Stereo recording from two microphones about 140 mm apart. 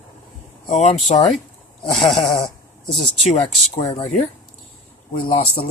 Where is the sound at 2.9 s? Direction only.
Centre (ahead or behind).